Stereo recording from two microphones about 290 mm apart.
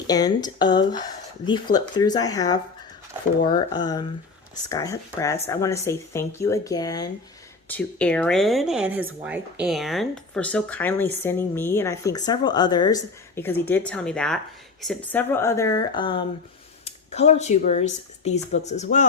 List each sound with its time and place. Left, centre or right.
0.1 s a woman's voice: centre
3.7 s a woman's voice: centre